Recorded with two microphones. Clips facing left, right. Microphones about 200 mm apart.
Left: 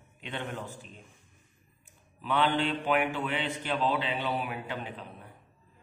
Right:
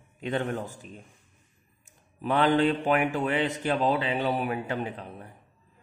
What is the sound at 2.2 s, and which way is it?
A man's voice, 40° right (ahead or behind).